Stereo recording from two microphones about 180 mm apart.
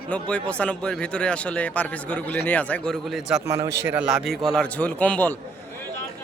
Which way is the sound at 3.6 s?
70° right (ahead or behind).